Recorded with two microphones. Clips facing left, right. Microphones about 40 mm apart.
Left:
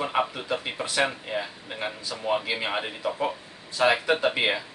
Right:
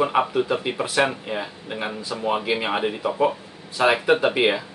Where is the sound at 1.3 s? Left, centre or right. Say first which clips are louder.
Right 3 dB; centre.